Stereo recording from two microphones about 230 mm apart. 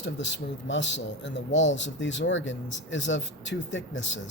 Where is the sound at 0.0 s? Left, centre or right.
Left.